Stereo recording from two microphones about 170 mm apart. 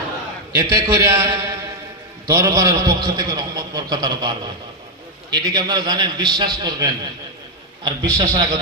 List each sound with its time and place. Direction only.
0.5 s a man's voice: 15° right (ahead or behind)